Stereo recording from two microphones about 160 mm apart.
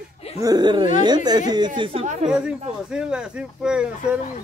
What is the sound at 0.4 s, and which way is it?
Speech, 25° right (ahead or behind).